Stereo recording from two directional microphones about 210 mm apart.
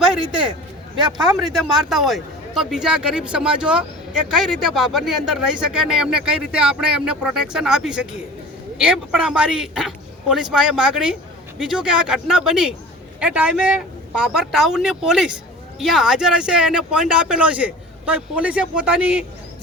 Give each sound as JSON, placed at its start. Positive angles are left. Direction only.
{"t": 0.2, "sound": "a man's voice", "side_deg": -25}
{"t": 1.5, "sound": "speech", "side_deg": 0}